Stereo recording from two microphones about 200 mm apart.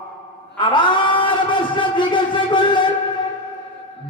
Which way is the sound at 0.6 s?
25° left (ahead or behind).